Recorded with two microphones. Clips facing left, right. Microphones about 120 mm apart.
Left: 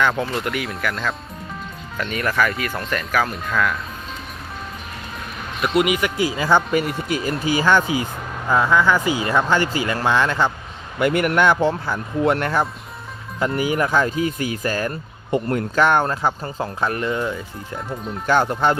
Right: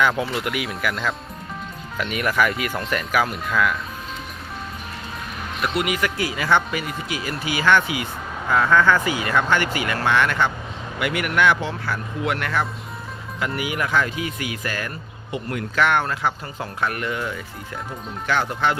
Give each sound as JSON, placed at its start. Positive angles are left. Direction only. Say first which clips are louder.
{"t": 0.2, "sound": "speech", "louder": "left 1 dB", "side_deg": -10}
{"t": 3.5, "sound": "speech", "louder": "even", "side_deg": 0}
{"t": 5.6, "sound": "speech", "louder": "left 4 dB", "side_deg": 15}
{"t": 6.7, "sound": "speech", "louder": "left 7 dB", "side_deg": 45}
{"t": 8.4, "sound": "speech", "louder": "even", "side_deg": 15}
{"t": 9.0, "sound": "speech", "louder": "left 2 dB", "side_deg": 25}
{"t": 18.3, "sound": "speech", "louder": "left 4 dB", "side_deg": 40}